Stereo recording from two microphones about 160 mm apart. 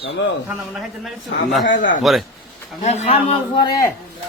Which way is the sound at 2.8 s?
45° left (ahead or behind).